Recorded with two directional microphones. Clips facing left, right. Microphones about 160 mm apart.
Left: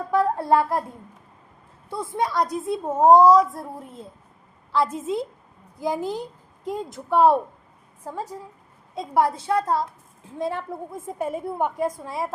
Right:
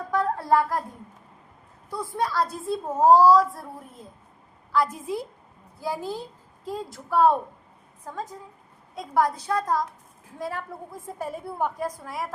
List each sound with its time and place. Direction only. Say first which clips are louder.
0.1 s speech: left 3 dB; 25° left (ahead or behind)
1.9 s a woman's voice: left 2 dB; 20° left (ahead or behind)
4.7 s a woman's voice: left 2 dB; 25° left (ahead or behind)
9.0 s a woman's voice: left 2 dB; 25° left (ahead or behind)